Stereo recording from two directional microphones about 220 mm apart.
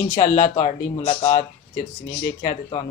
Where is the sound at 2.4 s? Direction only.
25° left (ahead or behind).